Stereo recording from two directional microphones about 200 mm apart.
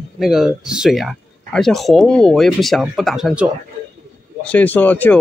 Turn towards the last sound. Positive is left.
turn(degrees=10)  # may be behind; listen again after turning